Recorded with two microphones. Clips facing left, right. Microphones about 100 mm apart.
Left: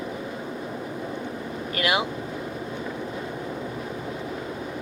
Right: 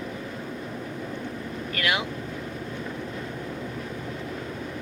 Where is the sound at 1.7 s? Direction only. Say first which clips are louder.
Left 3 dB; 10° left (ahead or behind).